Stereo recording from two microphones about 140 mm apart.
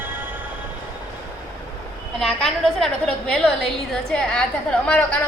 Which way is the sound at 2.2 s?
5° left (ahead or behind).